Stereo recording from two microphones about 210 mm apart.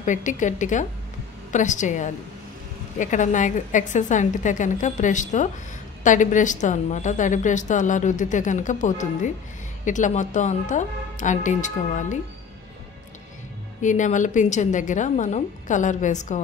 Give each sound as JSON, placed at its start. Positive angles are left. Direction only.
{"t": 0.0, "sound": "a woman's voice", "side_deg": 35}
{"t": 13.7, "sound": "a woman's voice", "side_deg": 35}